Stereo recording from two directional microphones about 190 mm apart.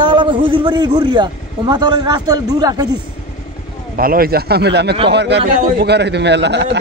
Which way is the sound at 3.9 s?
50° right (ahead or behind).